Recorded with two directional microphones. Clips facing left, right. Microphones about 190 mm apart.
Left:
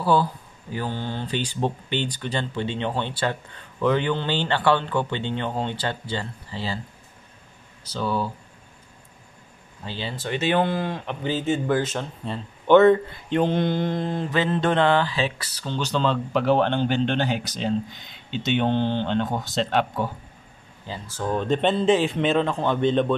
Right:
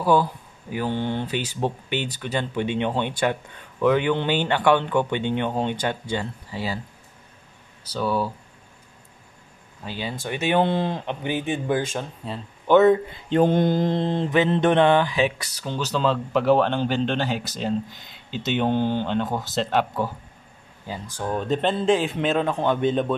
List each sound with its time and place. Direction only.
0.0 s speech: 15° right (ahead or behind)
1.2 s speech: 10° right (ahead or behind)
7.8 s speech: 10° right (ahead or behind)
9.8 s speech: 10° right (ahead or behind)
10.7 s speech: 25° right (ahead or behind); by 13.0 s 5° right (ahead or behind)
13.3 s mantra: 45° right (ahead or behind); by 20.1 s 5° right (ahead or behind)
20.8 s speech: 15° right (ahead or behind)